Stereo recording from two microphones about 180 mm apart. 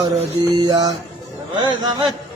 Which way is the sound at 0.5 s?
20° right (ahead or behind).